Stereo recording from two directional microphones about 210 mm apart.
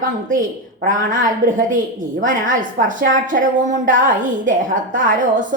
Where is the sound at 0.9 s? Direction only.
40° right (ahead or behind).